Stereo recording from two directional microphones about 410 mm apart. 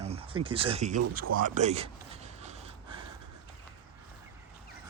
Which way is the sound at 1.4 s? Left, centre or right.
Centre.